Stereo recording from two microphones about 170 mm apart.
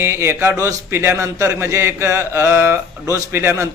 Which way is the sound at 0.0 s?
15° right (ahead or behind).